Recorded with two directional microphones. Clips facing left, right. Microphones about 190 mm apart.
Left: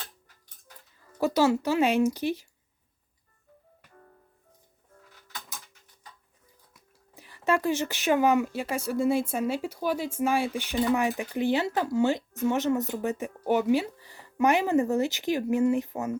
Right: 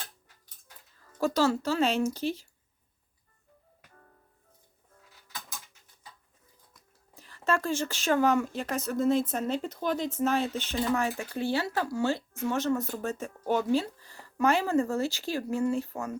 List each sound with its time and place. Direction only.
1.2 s speech: 15° left (ahead or behind)
7.1 s speech: 15° left (ahead or behind)